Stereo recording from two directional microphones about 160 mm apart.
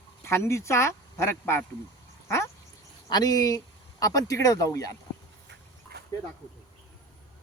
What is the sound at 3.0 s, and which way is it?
Speech, 25° left (ahead or behind).